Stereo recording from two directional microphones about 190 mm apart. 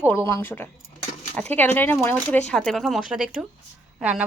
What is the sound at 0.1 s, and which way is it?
A woman's voice, 10° left (ahead or behind).